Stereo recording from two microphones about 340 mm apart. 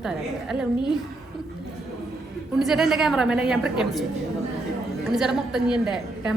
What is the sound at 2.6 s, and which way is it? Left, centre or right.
A woman's voice, centre.